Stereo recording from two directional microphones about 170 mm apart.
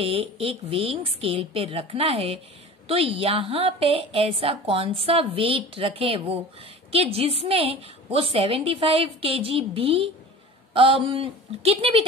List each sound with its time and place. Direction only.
0.0 s a woman's voice: 35° right (ahead or behind)